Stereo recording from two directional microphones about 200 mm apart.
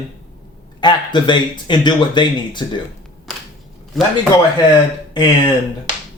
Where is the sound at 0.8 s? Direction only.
20° left (ahead or behind).